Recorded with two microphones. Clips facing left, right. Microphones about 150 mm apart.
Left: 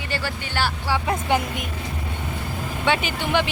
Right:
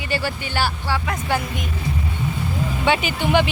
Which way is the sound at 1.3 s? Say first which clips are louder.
Left 1 dB; 20° left (ahead or behind).